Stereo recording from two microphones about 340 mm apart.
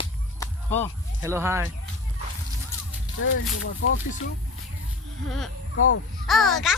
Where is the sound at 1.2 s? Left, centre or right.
Centre.